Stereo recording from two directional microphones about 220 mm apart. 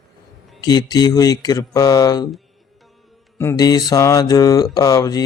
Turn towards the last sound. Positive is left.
turn(degrees=15)  # may be behind; listen again after turning